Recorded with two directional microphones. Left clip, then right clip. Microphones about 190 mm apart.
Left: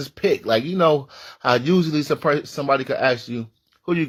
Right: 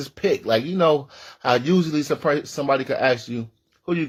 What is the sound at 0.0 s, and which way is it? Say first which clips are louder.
Speech: left 1 dB; 35° left (ahead or behind).